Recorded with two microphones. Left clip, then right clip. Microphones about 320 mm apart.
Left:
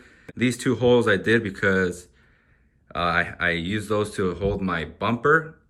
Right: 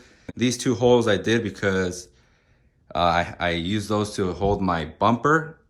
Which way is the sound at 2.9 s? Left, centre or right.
Centre.